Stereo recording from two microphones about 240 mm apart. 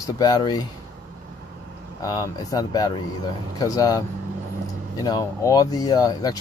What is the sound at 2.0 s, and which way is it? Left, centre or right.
Speech, centre.